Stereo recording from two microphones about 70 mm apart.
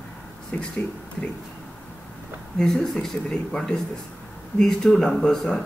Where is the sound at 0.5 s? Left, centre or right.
Centre.